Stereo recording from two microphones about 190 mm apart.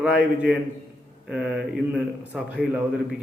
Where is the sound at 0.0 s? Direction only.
5° right (ahead or behind).